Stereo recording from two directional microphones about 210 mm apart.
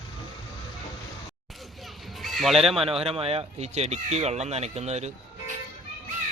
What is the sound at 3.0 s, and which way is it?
Speech, 30° right (ahead or behind).